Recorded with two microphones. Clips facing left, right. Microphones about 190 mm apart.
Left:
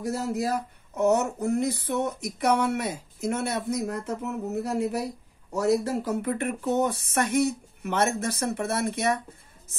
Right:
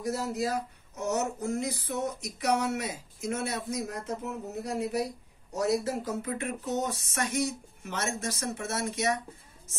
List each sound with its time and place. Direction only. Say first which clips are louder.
0.1 s speech: left 3 dB; 60° left (ahead or behind)